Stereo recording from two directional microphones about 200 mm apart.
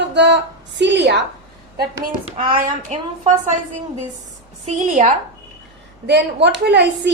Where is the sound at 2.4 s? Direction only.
45° right (ahead or behind).